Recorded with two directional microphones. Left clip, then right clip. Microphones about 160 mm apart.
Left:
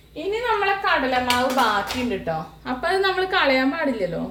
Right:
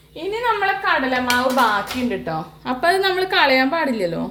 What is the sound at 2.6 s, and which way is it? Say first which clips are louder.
A woman's voice: right 4 dB; 75° right (ahead or behind).